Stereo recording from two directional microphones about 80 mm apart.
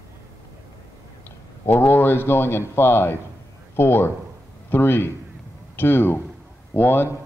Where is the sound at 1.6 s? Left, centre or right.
Left.